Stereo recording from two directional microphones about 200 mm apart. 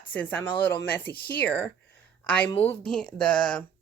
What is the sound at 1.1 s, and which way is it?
Speech, 50° left (ahead or behind).